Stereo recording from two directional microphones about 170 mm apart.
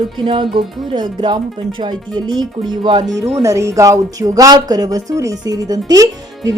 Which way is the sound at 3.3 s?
15° right (ahead or behind).